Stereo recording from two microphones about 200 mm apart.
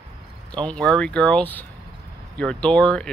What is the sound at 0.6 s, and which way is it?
Speech, 5° left (ahead or behind).